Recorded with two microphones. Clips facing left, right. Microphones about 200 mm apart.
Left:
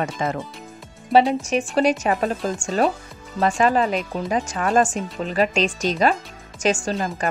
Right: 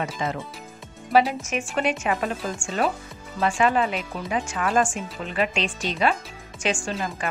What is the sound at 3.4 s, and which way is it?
Speech, 40° left (ahead or behind).